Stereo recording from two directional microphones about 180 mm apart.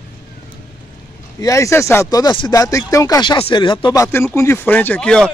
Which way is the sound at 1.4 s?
15° left (ahead or behind).